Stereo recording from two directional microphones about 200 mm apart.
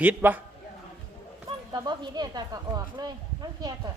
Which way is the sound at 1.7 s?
20° right (ahead or behind).